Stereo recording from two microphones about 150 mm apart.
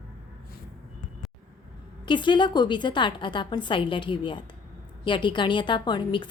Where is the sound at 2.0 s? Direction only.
30° left (ahead or behind).